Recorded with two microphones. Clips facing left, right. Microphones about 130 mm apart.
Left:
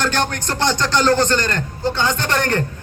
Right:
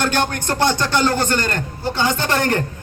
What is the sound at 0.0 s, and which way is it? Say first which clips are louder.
A man's voice: right 1 dB; 15° right (ahead or behind).